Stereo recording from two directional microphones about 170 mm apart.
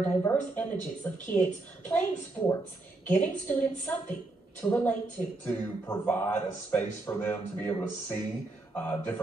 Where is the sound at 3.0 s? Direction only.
10° left (ahead or behind).